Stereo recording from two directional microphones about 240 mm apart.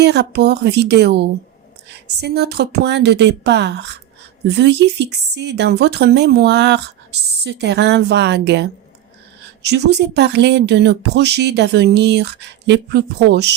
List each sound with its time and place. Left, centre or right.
0.0 s speech: right
9.6 s speech: right